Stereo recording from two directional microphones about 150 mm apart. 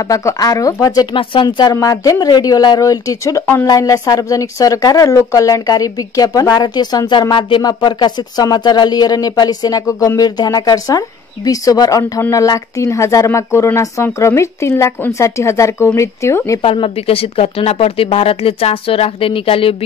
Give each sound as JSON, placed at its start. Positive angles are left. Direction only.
{"t": 0.0, "sound": "speech", "side_deg": 20}
{"t": 16.6, "sound": "speech", "side_deg": 40}